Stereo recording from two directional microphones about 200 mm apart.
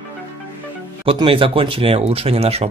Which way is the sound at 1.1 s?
25° right (ahead or behind).